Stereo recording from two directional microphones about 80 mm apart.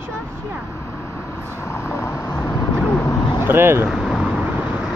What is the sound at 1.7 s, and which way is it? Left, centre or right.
Vehicle, left.